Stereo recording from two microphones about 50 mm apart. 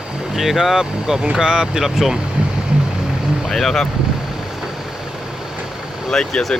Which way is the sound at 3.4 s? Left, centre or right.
Centre.